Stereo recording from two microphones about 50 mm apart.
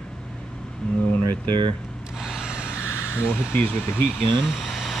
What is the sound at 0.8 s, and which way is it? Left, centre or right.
Speech, centre.